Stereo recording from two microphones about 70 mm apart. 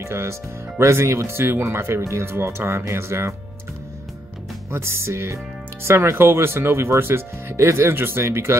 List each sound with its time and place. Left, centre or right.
0.0 s speech: right
4.6 s speech: right